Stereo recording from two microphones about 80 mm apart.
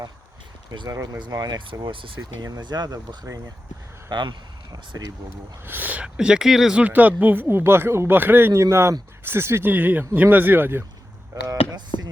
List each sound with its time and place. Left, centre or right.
0.9 s speech: right
1.3 s speech: right
1.8 s speech: right
2.4 s speech: right
5.6 s speech: right
6.1 s speech: centre
6.7 s speech: centre